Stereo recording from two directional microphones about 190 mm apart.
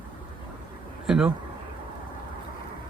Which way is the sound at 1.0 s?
5° right (ahead or behind).